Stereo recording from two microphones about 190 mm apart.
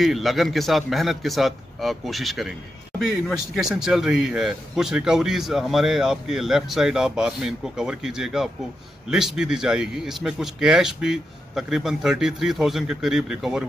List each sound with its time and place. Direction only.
0.0 s speech: centre (ahead or behind)